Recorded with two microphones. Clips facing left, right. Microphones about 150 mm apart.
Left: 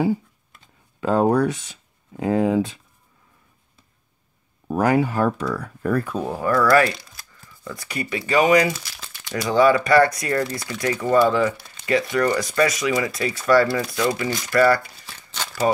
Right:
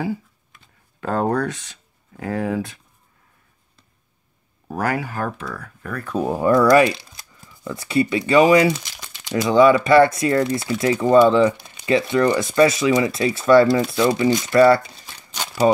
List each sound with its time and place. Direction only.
1.0 s speech: 15° left (ahead or behind)
4.6 s speech: 20° left (ahead or behind)
5.5 s speech: 35° left (ahead or behind)
6.2 s speech: 20° right (ahead or behind)
15.3 s a sound: 15° right (ahead or behind)